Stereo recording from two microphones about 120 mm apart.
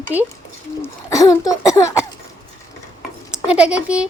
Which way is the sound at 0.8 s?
25° left (ahead or behind).